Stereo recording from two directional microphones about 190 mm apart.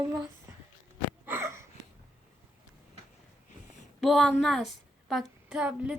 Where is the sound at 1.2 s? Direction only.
10° right (ahead or behind).